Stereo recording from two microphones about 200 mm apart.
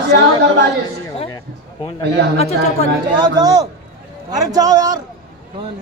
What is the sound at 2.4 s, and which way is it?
Speech, 35° left (ahead or behind).